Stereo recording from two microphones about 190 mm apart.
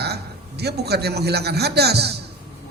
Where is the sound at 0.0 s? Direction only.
60° right (ahead or behind).